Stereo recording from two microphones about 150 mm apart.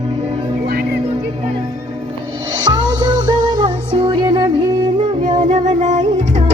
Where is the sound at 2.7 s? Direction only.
30° right (ahead or behind).